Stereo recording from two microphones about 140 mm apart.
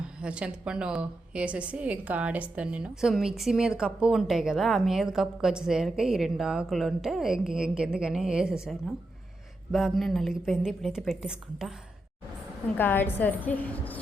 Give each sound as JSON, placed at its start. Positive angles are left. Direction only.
{"t": 0.2, "sound": "a woman's voice", "side_deg": -10}
{"t": 9.7, "sound": "a woman's voice", "side_deg": 0}
{"t": 12.7, "sound": "a woman's voice", "side_deg": 15}